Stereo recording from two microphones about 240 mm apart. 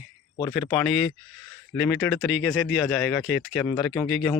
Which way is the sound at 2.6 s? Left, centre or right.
Centre.